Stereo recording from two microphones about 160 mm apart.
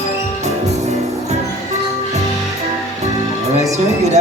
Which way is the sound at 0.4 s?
45° right (ahead or behind).